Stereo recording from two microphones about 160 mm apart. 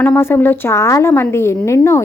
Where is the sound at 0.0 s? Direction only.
15° left (ahead or behind).